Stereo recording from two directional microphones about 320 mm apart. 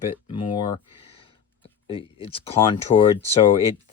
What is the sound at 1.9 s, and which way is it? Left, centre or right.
Speech, centre.